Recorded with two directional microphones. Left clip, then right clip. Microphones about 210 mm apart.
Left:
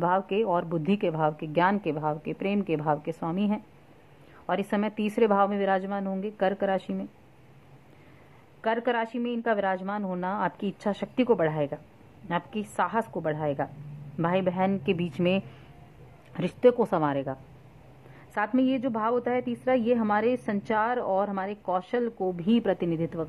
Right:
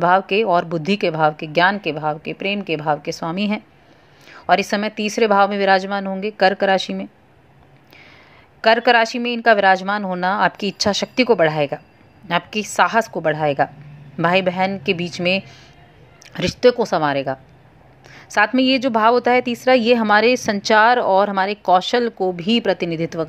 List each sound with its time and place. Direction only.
0.0 s a woman's voice: 20° right (ahead or behind)
8.5 s a woman's voice: 25° right (ahead or behind)